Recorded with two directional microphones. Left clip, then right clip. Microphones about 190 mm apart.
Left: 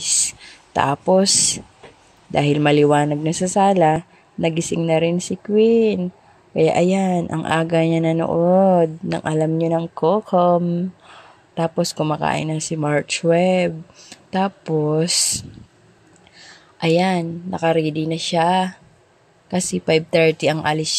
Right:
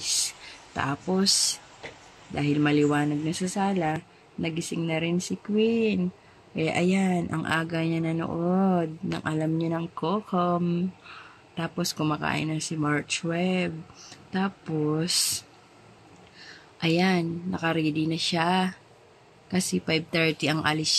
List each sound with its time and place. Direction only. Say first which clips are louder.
0.0 s writing: left 6 dB; 35° left (ahead or behind)
2.3 s speech: left 9 dB; 40° left (ahead or behind)
11.8 s speech: left 5 dB; 25° left (ahead or behind)